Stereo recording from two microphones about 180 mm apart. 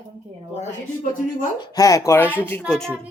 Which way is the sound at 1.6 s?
20° left (ahead or behind).